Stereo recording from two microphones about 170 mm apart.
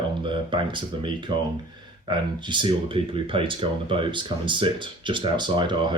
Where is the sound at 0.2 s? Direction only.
30° right (ahead or behind).